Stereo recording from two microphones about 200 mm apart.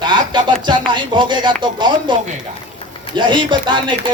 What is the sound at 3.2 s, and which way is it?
Music, 25° right (ahead or behind).